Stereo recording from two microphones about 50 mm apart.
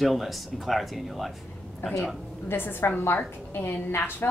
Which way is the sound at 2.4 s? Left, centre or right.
Left.